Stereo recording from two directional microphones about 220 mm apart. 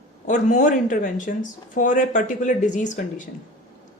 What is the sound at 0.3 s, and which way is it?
Speech, 35° left (ahead or behind).